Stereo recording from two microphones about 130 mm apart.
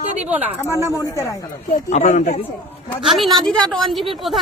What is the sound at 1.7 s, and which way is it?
Speech, 65° left (ahead or behind).